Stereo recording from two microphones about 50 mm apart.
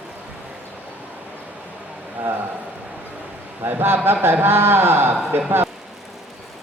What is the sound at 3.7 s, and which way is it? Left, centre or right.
A man's voice, right.